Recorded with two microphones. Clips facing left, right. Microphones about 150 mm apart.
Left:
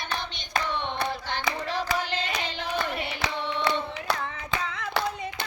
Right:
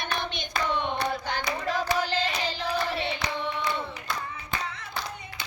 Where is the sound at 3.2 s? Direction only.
85° left.